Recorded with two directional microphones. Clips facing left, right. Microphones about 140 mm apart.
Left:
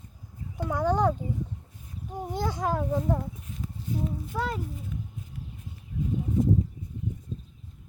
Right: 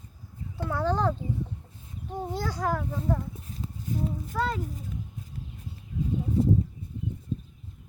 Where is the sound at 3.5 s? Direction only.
35° right (ahead or behind).